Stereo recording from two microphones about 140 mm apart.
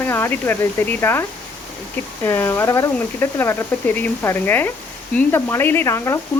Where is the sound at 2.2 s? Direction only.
20° left (ahead or behind).